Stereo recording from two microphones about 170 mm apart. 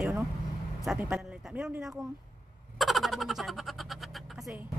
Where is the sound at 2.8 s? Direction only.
Centre (ahead or behind).